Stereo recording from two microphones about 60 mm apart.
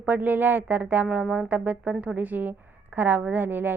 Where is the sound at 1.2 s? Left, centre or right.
Centre.